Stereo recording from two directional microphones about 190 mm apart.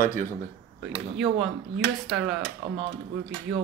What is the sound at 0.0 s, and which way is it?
Speech, 45° left (ahead or behind).